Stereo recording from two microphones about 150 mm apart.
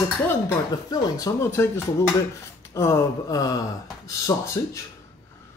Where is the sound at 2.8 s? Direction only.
20° left (ahead or behind).